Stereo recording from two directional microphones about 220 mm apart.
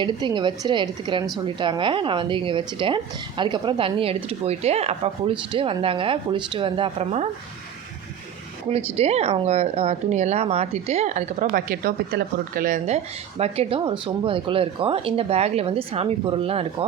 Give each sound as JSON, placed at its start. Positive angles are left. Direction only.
{"t": 0.0, "sound": "speech", "side_deg": -20}
{"t": 8.7, "sound": "speech", "side_deg": -25}